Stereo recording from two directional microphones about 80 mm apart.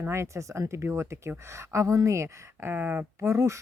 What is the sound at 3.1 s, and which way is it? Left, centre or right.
Speech, right.